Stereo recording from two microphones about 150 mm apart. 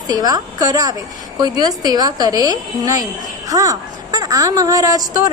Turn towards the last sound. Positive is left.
turn(degrees=-25)  # may be behind; listen again after turning